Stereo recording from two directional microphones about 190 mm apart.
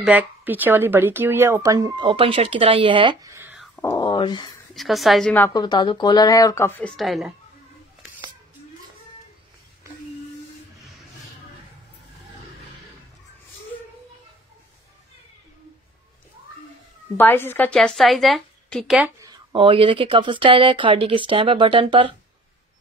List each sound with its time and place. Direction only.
0.0 s speech: 10° right (ahead or behind)
3.7 s a sound: 15° left (ahead or behind)
4.7 s a woman's voice: centre (ahead or behind)
5.5 s speech: 20° left (ahead or behind)
7.0 s a woman's voice: centre (ahead or behind)
17.2 s a woman's voice: 10° left (ahead or behind)
19.2 s speech: 25° right (ahead or behind)